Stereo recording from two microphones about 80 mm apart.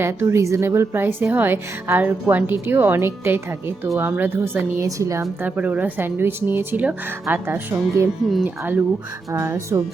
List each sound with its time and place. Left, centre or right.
0.0 s a woman's voice: right
4.8 s a woman's voice: right
5.4 s a woman's voice: centre
9.3 s speech: right